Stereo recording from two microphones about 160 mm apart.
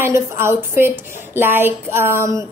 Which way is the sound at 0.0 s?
15° right (ahead or behind).